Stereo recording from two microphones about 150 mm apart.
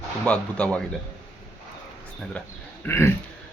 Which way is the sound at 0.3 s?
10° left (ahead or behind).